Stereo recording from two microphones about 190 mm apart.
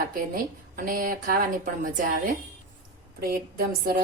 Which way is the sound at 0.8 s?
45° right (ahead or behind).